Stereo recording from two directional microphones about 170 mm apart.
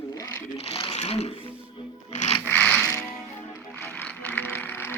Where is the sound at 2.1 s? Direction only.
40° left (ahead or behind).